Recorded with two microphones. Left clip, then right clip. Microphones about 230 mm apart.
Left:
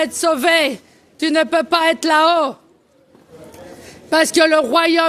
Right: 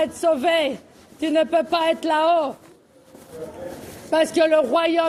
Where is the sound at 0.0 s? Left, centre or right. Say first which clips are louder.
Left 3 dB; left.